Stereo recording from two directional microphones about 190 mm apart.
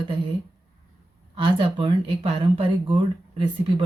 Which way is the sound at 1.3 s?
30° right (ahead or behind).